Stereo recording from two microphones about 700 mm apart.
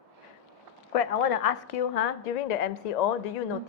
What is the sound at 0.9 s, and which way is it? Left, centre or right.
A woman's voice, left.